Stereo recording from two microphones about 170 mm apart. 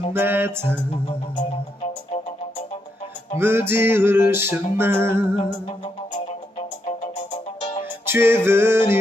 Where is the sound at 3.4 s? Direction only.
15° right (ahead or behind).